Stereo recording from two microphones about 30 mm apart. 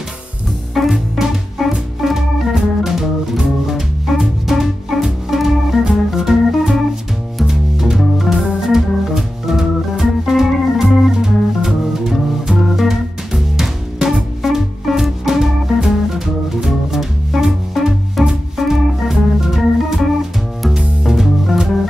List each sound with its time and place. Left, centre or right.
0.7 s music: centre
1.6 s music: centre
2.0 s organ: centre
7.4 s music: centre
8.0 s organ: centre
11.1 s music: centre
14.4 s music: centre
19.4 s organ: centre
21.0 s music: centre